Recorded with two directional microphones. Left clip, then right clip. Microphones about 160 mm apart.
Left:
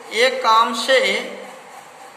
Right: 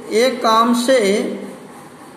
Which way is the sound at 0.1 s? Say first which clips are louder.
Right 1 dB; 30° right (ahead or behind).